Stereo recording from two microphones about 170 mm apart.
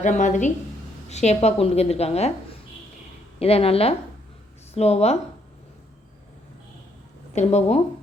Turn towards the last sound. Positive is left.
turn(degrees=40)  # may be behind; listen again after turning